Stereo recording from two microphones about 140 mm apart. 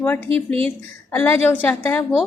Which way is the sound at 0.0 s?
10° left (ahead or behind).